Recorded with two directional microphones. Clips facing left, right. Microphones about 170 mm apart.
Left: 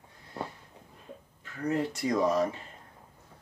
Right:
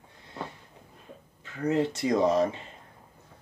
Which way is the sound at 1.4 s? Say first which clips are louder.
Right 4 dB; 25° right (ahead or behind).